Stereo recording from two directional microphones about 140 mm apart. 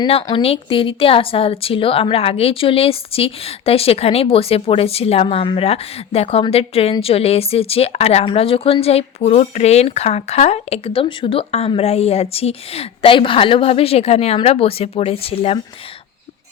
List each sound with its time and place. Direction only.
0.3 s speech: 40° left (ahead or behind)